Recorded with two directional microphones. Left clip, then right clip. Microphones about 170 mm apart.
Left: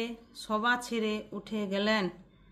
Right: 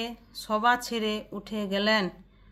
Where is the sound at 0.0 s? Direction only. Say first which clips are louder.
Right 2 dB; 20° right (ahead or behind).